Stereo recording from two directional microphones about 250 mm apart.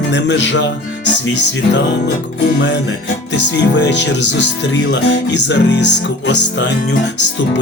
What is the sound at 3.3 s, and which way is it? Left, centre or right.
Speech, left.